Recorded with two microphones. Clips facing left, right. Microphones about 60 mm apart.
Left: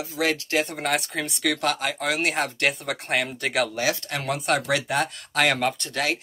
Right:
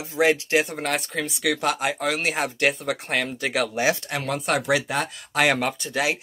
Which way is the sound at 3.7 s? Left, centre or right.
Right.